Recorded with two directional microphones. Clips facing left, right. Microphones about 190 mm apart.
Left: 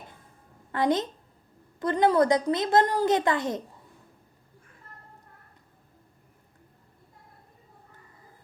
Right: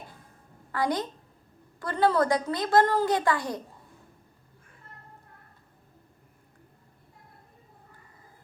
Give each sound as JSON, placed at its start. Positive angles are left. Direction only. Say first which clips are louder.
{"t": 0.7, "sound": "a woman's voice", "louder": "left 3 dB", "side_deg": 20}